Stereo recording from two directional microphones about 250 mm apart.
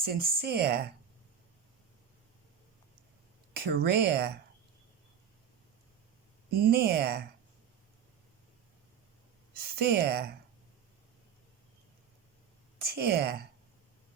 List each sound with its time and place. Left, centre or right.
0.0 s speech: right
3.5 s speech: right
6.7 s speech: right
9.7 s speech: right
12.9 s speech: right